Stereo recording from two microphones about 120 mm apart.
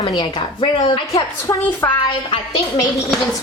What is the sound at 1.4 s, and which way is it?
Speech, 20° left (ahead or behind).